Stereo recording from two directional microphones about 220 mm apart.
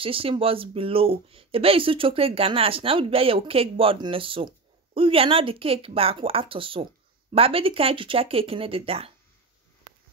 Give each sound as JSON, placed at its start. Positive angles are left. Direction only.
{"t": 0.0, "sound": "speech", "side_deg": -25}